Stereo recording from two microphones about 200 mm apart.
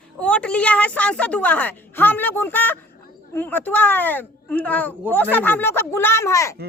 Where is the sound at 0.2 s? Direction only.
5° left (ahead or behind).